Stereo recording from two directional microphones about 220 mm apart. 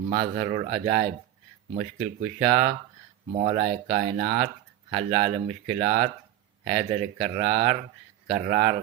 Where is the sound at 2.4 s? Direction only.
25° right (ahead or behind).